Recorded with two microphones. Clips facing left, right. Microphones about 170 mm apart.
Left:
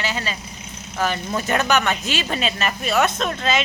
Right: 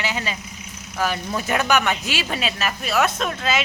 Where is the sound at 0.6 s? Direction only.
30° left (ahead or behind).